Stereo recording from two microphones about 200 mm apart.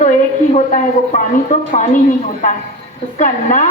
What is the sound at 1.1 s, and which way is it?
Speech, 35° left (ahead or behind).